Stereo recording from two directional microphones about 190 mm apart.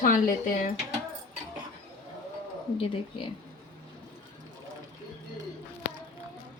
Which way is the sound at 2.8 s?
30° left (ahead or behind).